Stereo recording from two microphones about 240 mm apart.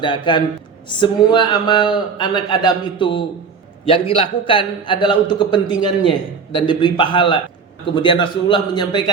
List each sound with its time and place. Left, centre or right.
0.0 s a man's voice: centre